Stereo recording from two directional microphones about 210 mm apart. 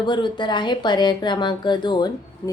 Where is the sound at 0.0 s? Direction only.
20° left (ahead or behind).